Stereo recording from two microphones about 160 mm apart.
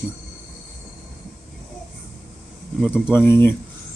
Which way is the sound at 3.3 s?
15° left (ahead or behind).